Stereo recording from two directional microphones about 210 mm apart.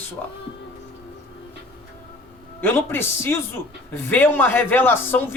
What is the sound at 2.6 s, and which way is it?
A man's voice, 10° left (ahead or behind).